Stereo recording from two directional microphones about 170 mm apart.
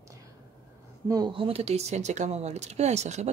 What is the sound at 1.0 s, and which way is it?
Speech, 25° right (ahead or behind).